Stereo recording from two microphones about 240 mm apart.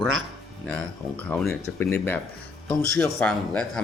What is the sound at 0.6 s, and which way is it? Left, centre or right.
Speech, centre.